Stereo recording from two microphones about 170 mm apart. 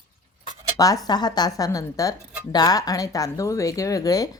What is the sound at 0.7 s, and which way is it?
Speech, 20° left (ahead or behind).